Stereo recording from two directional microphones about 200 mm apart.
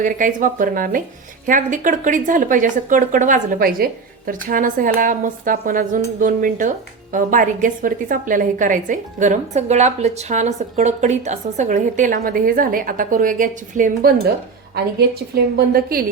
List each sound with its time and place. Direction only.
0.0 s speech: 40° right (ahead or behind)
15.5 s a woman's voice: 50° right (ahead or behind)